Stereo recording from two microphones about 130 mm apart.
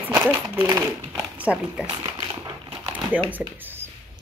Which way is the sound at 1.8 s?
35° right (ahead or behind).